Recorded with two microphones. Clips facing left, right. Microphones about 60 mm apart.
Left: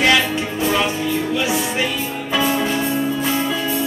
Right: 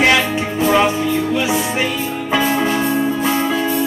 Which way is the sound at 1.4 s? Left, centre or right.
Right.